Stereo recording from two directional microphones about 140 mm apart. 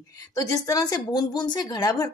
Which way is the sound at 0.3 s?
25° left (ahead or behind).